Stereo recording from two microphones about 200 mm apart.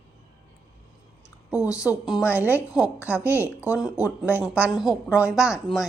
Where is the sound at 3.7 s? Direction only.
Centre (ahead or behind).